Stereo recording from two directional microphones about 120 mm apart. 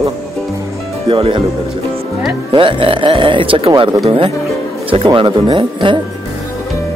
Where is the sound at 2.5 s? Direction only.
45° right (ahead or behind).